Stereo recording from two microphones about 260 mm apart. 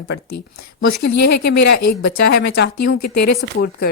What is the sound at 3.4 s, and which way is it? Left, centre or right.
Speech, left.